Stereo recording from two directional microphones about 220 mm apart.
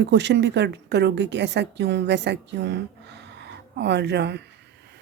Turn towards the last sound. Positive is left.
turn(degrees=-50)  # may be behind; listen again after turning